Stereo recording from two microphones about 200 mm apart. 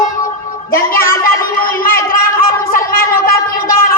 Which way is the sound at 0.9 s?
45° left (ahead or behind).